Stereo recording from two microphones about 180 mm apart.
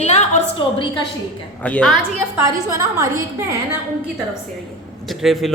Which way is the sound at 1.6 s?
10° left (ahead or behind).